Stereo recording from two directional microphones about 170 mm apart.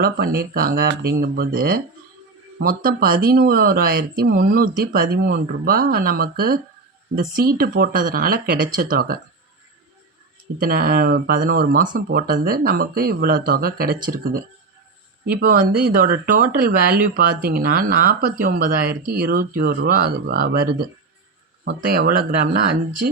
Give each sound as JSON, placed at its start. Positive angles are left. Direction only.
{"t": 0.0, "sound": "speech", "side_deg": -60}
{"t": 10.6, "sound": "speech", "side_deg": -60}
{"t": 11.9, "sound": "speech", "side_deg": -75}
{"t": 21.6, "sound": "speech", "side_deg": -75}